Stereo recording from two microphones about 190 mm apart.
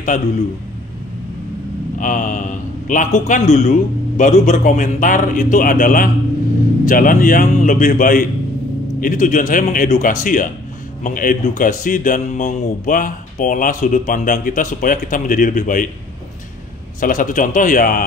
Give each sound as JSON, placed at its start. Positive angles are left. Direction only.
{"t": 2.0, "sound": "speech", "side_deg": 45}
{"t": 17.0, "sound": "speech", "side_deg": 45}